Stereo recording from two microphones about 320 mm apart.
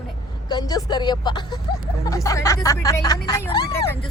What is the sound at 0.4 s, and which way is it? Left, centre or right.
Speech, centre.